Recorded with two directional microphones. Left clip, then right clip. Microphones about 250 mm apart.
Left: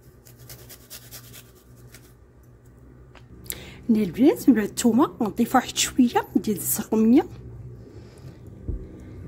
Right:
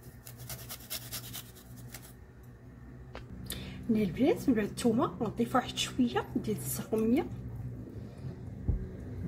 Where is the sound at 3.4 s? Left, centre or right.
Left.